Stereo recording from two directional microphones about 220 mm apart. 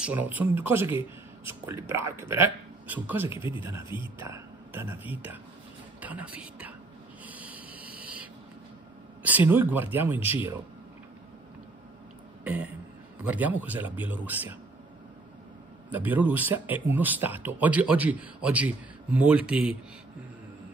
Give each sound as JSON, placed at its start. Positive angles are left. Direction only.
{"t": 0.0, "sound": "speech", "side_deg": -10}
{"t": 3.3, "sound": "speech", "side_deg": 20}
{"t": 4.2, "sound": "speech", "side_deg": -10}
{"t": 7.2, "sound": "owl", "side_deg": -5}
{"t": 9.5, "sound": "speech", "side_deg": -10}
{"t": 12.4, "sound": "a sound", "side_deg": -5}
{"t": 13.2, "sound": "speech", "side_deg": -5}
{"t": 15.9, "sound": "speech", "side_deg": -5}